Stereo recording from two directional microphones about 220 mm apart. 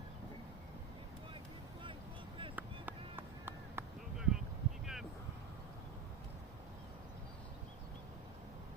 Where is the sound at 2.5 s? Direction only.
10° right (ahead or behind).